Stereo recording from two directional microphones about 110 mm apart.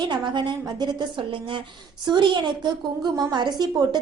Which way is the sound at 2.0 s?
45° right (ahead or behind).